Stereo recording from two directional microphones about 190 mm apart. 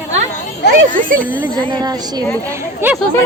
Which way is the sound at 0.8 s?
45° right (ahead or behind).